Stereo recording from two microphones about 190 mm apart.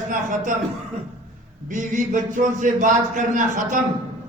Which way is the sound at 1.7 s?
40° right (ahead or behind).